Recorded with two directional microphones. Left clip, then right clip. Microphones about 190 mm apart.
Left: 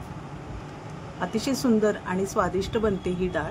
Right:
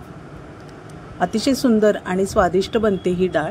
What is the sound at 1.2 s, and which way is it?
A woman's voice, 35° right (ahead or behind).